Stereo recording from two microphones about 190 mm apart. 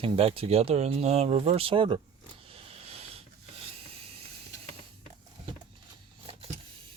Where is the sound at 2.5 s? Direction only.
30° right (ahead or behind).